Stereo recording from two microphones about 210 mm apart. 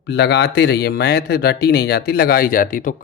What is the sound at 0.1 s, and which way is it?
Speech, 55° left (ahead or behind).